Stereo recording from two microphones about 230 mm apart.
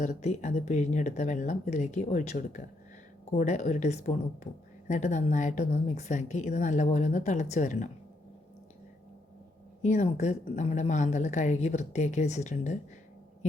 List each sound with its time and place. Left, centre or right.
0.0 s speech: left
9.8 s speech: left